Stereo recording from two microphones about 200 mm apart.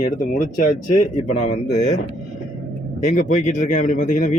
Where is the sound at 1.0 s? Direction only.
35° left (ahead or behind).